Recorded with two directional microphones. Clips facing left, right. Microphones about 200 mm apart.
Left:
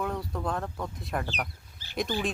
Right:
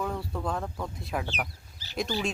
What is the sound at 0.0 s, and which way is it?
Speech, 5° right (ahead or behind).